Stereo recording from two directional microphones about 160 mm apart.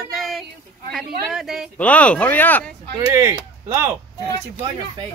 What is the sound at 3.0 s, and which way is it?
Speech, 15° right (ahead or behind).